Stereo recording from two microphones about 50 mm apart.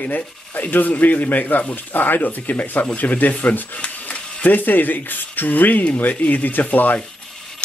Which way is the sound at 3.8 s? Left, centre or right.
Left.